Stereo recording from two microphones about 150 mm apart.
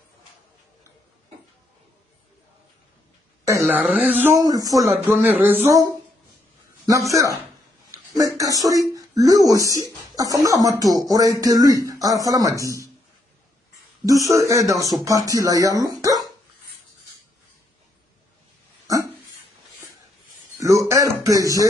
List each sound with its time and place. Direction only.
3.6 s speech: 10° right (ahead or behind)
4.4 s speech: 25° right (ahead or behind)
5.1 s speech: 10° right (ahead or behind)
6.9 s speech: 20° right (ahead or behind)
14.0 s speech: 20° right (ahead or behind)
15.8 s dog: 25° right (ahead or behind)
20.5 s a sound: 20° right (ahead or behind)